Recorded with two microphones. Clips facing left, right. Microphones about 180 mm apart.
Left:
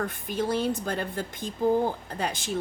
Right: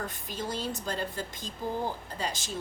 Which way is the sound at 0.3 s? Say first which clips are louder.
Left 9 dB; 55° left (ahead or behind).